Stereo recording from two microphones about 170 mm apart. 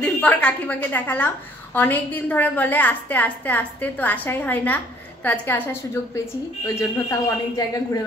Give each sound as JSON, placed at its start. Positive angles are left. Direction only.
{"t": 0.0, "sound": "a woman's voice", "side_deg": 10}